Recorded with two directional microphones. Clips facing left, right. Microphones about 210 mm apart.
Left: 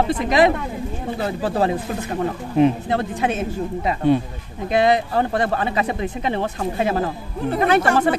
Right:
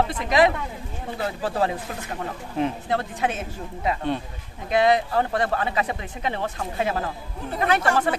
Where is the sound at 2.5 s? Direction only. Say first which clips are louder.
Left 7 dB; 20° left (ahead or behind).